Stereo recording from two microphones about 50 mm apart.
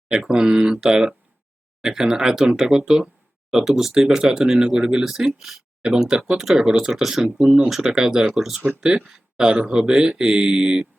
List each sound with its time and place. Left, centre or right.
0.1 s speech: centre
5.8 s speech: centre
9.4 s speech: centre